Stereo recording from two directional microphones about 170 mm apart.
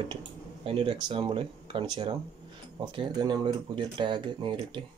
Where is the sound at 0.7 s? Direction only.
30° right (ahead or behind).